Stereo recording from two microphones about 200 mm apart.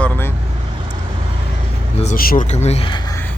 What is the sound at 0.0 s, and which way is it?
Vehicle, 10° left (ahead or behind).